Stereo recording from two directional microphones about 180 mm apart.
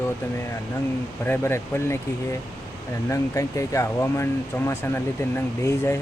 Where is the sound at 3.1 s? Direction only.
15° left (ahead or behind).